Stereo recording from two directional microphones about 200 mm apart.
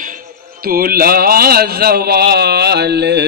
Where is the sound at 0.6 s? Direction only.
50° right (ahead or behind).